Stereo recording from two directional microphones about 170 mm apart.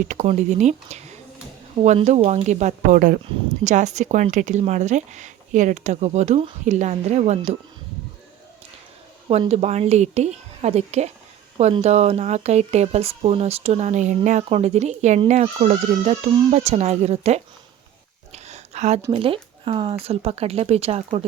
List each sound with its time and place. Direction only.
0.1 s speech: 45° right (ahead or behind)
9.3 s speech: 40° right (ahead or behind)
18.3 s a sound: 40° right (ahead or behind)
19.1 s speech: 30° right (ahead or behind)